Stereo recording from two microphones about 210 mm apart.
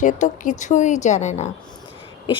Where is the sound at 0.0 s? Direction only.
35° left (ahead or behind).